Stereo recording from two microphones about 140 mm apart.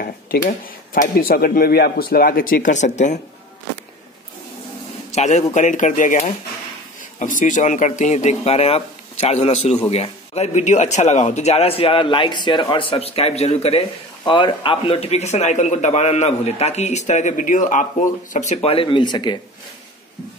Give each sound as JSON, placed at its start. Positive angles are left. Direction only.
{"t": 0.0, "sound": "speech", "side_deg": 80}
{"t": 5.1, "sound": "a man's voice", "side_deg": 55}
{"t": 14.2, "sound": "a man's voice", "side_deg": 35}